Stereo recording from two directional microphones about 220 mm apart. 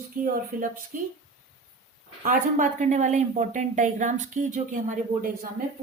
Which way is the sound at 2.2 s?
35° right (ahead or behind).